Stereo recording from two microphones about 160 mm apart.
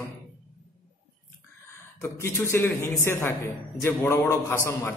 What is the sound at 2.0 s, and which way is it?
A man's voice, 15° left (ahead or behind).